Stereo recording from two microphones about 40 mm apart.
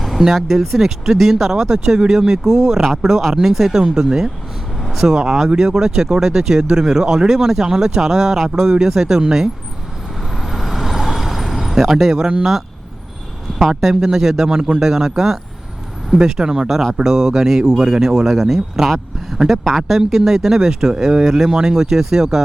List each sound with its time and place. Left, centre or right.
0.3 s speech: centre
10.3 s vehicle: centre
13.6 s speech: centre
19.9 s speech: centre